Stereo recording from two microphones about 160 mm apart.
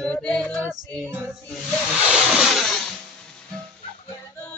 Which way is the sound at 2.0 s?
5° right (ahead or behind).